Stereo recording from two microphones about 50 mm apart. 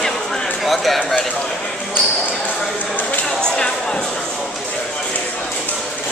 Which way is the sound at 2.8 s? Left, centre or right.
Left.